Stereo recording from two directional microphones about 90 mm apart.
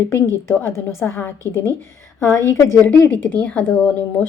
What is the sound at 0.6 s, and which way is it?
A woman's voice, 30° left (ahead or behind).